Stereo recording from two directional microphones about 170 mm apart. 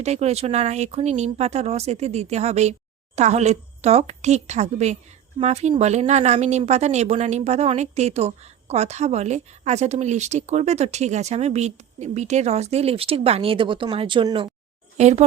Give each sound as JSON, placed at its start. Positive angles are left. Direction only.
{"t": 0.0, "sound": "speech", "side_deg": -40}
{"t": 14.9, "sound": "speech", "side_deg": -40}